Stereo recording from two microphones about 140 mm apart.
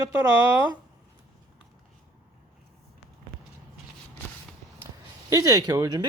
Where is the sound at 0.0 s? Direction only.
20° right (ahead or behind).